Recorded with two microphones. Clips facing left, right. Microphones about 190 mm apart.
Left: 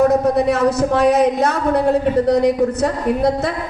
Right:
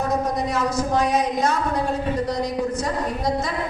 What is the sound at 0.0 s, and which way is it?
Speech, 65° left (ahead or behind).